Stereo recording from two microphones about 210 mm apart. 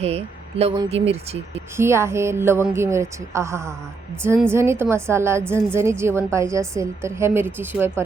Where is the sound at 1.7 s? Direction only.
10° right (ahead or behind).